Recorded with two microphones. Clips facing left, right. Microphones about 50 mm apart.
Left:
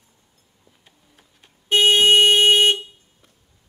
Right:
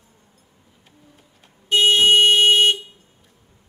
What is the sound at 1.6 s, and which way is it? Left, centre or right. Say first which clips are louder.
Car alarm: even; left.